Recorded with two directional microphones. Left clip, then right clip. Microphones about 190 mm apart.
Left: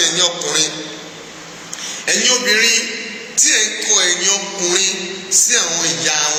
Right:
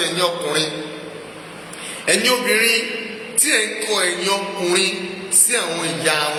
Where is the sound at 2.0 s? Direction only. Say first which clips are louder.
Left 2 dB; 25° right (ahead or behind).